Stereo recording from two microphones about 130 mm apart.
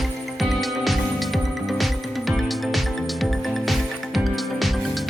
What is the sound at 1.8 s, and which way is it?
Music, centre (ahead or behind).